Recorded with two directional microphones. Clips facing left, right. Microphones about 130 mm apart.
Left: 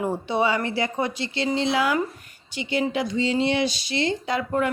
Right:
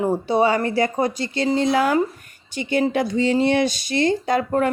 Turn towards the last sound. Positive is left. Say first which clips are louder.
# right 4 dB
turn(degrees=-45)  # may be behind; listen again after turning